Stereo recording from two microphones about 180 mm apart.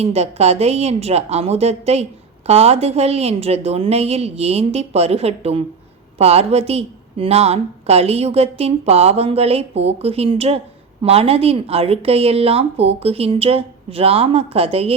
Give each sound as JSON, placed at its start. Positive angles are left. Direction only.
{"t": 0.0, "sound": "a woman's voice", "side_deg": -35}